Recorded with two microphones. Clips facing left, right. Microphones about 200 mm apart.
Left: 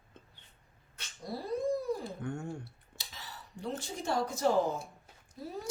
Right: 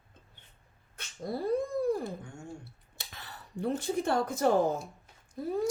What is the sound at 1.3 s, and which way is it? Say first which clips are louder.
Dog: right 2 dB; 55° right (ahead or behind).